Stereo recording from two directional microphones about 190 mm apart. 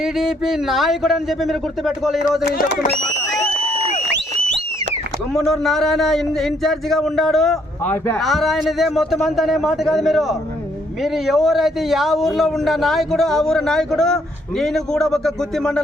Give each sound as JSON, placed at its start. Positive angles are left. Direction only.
{"t": 0.0, "sound": "a man's voice", "side_deg": 0}
{"t": 2.4, "sound": "speech", "side_deg": 55}
{"t": 5.3, "sound": "a man's voice", "side_deg": 0}